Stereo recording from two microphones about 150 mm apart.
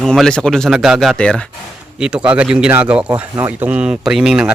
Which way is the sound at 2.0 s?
5° right (ahead or behind).